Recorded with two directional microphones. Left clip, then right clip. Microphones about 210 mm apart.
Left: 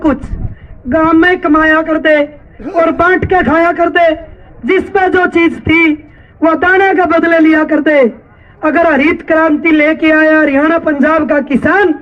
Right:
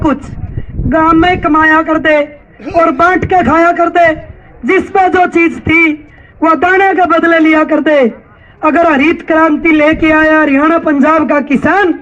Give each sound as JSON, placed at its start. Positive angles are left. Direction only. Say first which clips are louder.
{"t": 0.9, "sound": "speech", "louder": "right 1 dB", "side_deg": 25}